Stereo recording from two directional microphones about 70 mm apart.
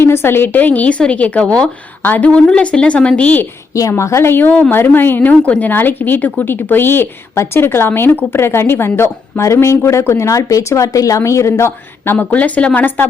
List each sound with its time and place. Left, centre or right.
0.0 s a woman's voice: left; by 3.4 s centre
3.8 s a woman's voice: left
12.2 s a woman's voice: left